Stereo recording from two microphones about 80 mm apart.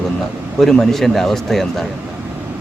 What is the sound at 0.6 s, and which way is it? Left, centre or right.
A man's voice, centre.